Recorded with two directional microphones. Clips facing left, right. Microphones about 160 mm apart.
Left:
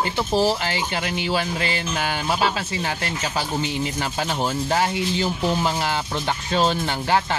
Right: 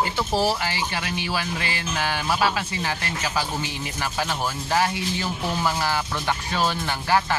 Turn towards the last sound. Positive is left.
turn(degrees=25)  # may be behind; listen again after turning